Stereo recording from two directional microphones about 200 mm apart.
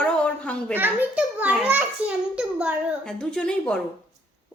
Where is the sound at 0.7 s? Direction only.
10° right (ahead or behind).